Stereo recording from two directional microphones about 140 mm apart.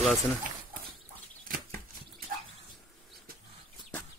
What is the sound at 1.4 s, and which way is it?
Bird flight, 90° right.